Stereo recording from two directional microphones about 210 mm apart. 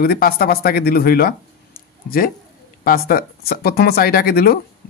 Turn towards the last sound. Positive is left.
turn(degrees=45)  # may be behind; listen again after turning